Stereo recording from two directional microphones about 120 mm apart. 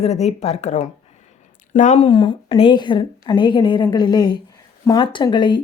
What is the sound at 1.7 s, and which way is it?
Speech, 90° left.